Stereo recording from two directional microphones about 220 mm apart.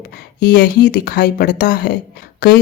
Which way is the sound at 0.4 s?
45° left (ahead or behind).